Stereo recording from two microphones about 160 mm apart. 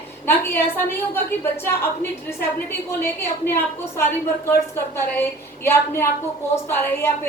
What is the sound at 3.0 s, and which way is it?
A woman's voice, 15° left (ahead or behind).